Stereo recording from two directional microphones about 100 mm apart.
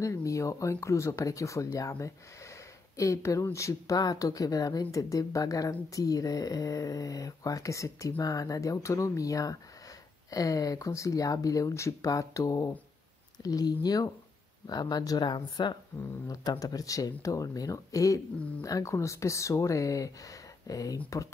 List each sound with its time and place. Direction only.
0.0 s speech: 30° left (ahead or behind); by 15.8 s 45° left (ahead or behind)
16.0 s speech: 35° left (ahead or behind)